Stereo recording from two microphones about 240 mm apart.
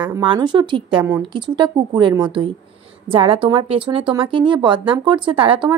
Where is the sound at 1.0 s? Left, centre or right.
Centre.